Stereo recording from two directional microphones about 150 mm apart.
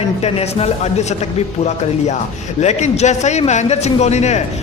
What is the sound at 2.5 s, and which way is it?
A man's voice, 50° left (ahead or behind).